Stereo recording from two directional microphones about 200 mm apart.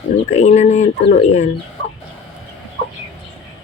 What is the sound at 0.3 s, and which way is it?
Speech, 35° left (ahead or behind).